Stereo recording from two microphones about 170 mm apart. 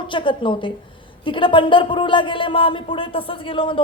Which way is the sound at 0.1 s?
30° left (ahead or behind).